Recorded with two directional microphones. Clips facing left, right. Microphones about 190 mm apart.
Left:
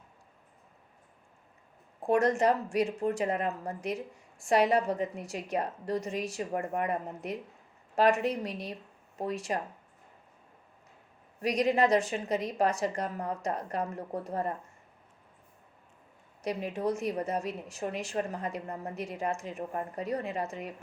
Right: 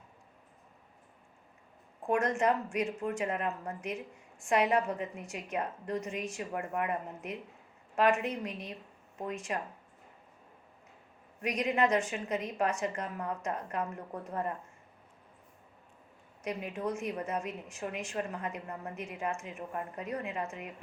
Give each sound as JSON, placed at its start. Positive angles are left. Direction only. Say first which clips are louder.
{"t": 2.0, "sound": "a woman's voice", "louder": "left 4 dB", "side_deg": 35}
{"t": 11.3, "sound": "a woman's voice", "louder": "left 4 dB", "side_deg": 35}
{"t": 16.4, "sound": "a woman's voice", "louder": "left 4 dB", "side_deg": 35}